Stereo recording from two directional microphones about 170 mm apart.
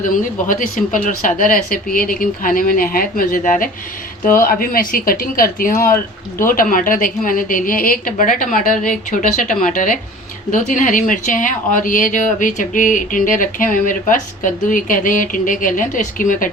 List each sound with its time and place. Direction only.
0.0 s speech: 50° left (ahead or behind)